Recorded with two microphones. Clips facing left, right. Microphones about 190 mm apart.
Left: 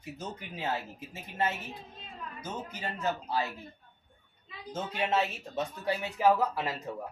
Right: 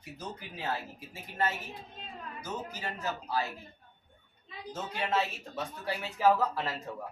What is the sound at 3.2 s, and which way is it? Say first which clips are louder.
Speech: left 1 dB; 20° left (ahead or behind).